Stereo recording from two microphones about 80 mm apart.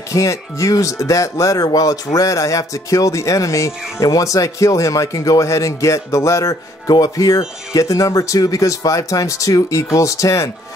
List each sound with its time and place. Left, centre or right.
0.1 s speech: left